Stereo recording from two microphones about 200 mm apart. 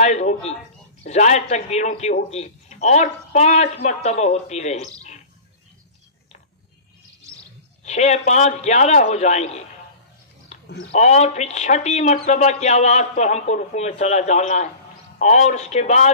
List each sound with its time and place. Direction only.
0.0 s speech: 35° left (ahead or behind)
7.8 s speech: 35° left (ahead or behind)
10.5 s a sound: 35° left (ahead or behind)
10.9 s speech: 35° left (ahead or behind)